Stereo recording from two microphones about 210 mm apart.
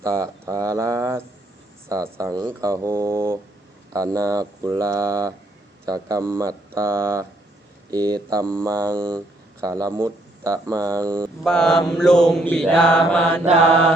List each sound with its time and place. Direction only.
0.0 s a man's voice: 15° right (ahead or behind)
11.4 s mantra: 5° left (ahead or behind)